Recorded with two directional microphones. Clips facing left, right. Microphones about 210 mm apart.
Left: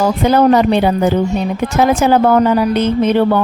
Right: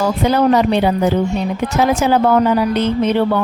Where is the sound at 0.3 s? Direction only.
50° left (ahead or behind).